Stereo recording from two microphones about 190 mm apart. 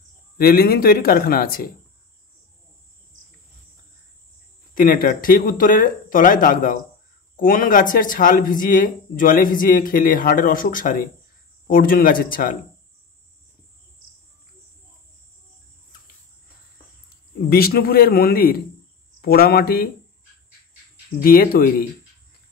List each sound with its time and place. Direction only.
0.4 s speech: 55° left (ahead or behind)
4.7 s speech: 50° left (ahead or behind)
17.5 s speech: 50° left (ahead or behind)
21.2 s speech: 50° left (ahead or behind)